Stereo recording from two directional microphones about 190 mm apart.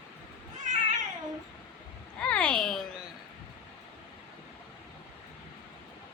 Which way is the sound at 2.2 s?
5° left (ahead or behind).